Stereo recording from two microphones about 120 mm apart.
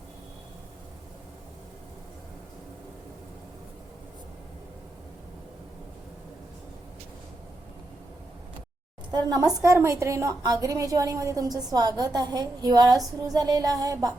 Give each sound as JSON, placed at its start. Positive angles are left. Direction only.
{"t": 9.1, "sound": "music", "side_deg": -30}
{"t": 9.6, "sound": "a woman's voice", "side_deg": -25}
{"t": 13.2, "sound": "music", "side_deg": -30}